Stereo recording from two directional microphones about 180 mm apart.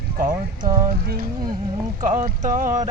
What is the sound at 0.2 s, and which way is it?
Speech, 50° right (ahead or behind).